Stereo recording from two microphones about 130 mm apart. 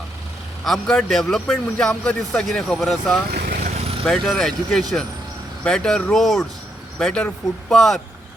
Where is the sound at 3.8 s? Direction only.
50° right (ahead or behind).